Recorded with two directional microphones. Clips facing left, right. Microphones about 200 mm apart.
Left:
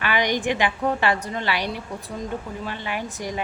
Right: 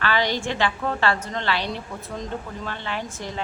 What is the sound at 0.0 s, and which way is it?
A woman's voice, 15° left (ahead or behind).